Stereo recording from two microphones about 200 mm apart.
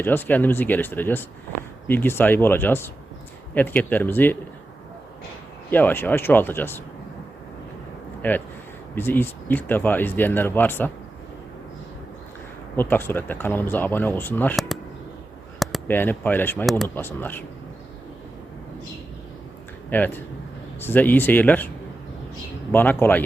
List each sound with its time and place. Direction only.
0.0 s speech: 10° left (ahead or behind)
5.7 s speech: 10° left (ahead or behind)
8.2 s speech: 10° left (ahead or behind)
12.7 s speech: 10° left (ahead or behind)
19.9 s speech: 10° left (ahead or behind)
22.7 s speech: 10° left (ahead or behind)